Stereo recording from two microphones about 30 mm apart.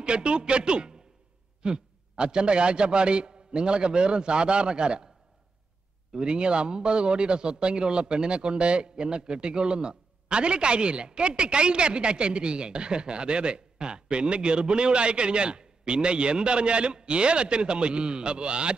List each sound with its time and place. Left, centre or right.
0.0 s a man's voice: right
6.2 s a man's voice: right